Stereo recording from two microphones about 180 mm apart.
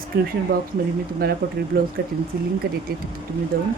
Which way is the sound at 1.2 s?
55° right (ahead or behind).